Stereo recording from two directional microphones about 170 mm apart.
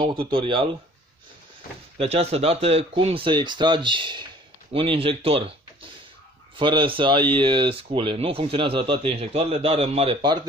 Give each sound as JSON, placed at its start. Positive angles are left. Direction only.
{"t": 0.0, "sound": "speech", "side_deg": -30}
{"t": 2.0, "sound": "speech", "side_deg": -35}